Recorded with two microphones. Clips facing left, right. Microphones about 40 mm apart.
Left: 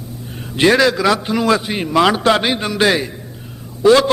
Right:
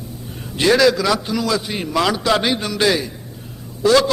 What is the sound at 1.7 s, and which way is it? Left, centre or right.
Speech, left.